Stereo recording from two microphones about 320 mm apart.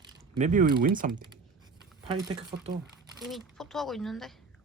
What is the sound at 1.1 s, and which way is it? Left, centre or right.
Speech, centre.